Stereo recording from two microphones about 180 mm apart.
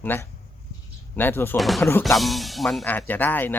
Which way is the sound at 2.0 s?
Centre (ahead or behind).